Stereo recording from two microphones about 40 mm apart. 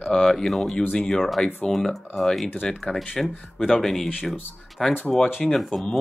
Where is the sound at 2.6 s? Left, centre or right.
Centre.